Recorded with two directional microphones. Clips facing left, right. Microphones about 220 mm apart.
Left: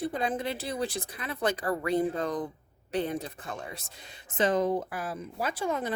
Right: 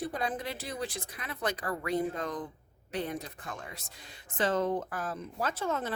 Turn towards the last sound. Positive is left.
turn(degrees=15)  # may be behind; listen again after turning